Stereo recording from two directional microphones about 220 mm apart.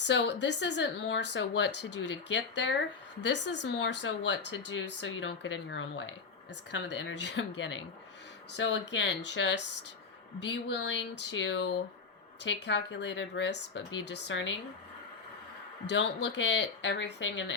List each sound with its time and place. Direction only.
0.0 s speech: 55° left (ahead or behind)
15.9 s speech: 50° left (ahead or behind)